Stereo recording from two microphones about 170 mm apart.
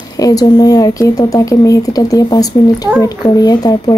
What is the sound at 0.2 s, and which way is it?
Speech, 20° left (ahead or behind).